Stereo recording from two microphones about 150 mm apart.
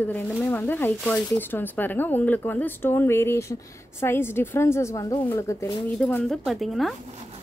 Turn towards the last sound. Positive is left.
turn(degrees=0)  # may be behind; listen again after turning